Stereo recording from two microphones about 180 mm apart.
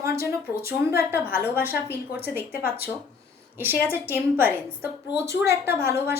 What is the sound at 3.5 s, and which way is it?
A woman's voice, 10° right (ahead or behind).